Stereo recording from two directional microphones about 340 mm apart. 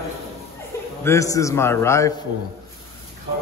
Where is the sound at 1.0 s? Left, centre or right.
Centre.